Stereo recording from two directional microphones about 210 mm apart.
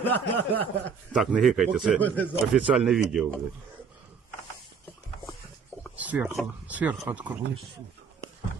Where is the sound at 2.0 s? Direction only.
10° left (ahead or behind).